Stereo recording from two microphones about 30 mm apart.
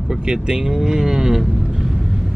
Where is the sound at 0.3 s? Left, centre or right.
Right.